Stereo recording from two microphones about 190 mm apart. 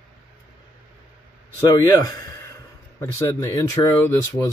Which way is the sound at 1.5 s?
20° left (ahead or behind).